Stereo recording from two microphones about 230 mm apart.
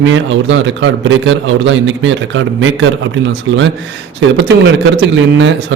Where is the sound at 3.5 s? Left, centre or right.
Right.